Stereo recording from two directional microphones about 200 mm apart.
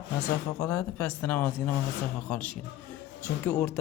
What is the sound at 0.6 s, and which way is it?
Speech, 5° left (ahead or behind).